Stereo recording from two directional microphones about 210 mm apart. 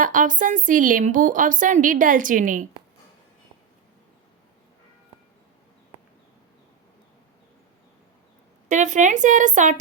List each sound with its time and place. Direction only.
0.0 s a woman's voice: 40° right (ahead or behind)
8.7 s a woman's voice: 35° right (ahead or behind)